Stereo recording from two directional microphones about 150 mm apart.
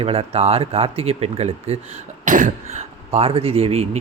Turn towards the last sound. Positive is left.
turn(degrees=-40)  # may be behind; listen again after turning